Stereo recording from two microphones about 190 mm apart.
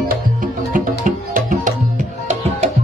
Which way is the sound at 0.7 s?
45° right (ahead or behind).